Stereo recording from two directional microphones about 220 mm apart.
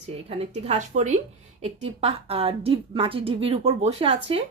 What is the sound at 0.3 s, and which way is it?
A woman's voice, 30° right (ahead or behind).